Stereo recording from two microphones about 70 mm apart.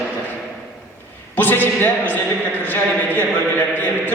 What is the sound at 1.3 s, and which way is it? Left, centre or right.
A man's voice, left.